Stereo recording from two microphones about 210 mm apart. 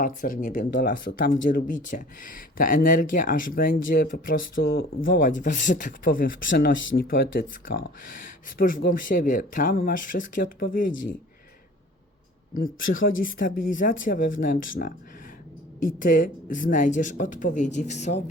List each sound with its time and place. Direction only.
0.0 s speech: 40° left (ahead or behind)
12.9 s speech: 40° left (ahead or behind)
16.0 s speech: 40° left (ahead or behind)